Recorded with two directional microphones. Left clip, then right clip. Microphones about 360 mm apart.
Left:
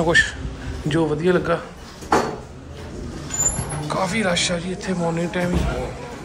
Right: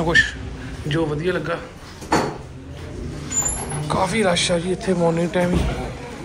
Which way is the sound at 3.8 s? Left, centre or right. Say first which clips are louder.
Right 2 dB; centre.